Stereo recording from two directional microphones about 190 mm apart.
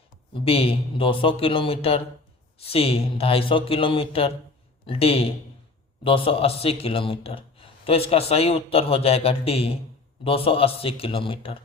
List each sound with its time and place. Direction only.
0.3 s a man's voice: 30° left (ahead or behind)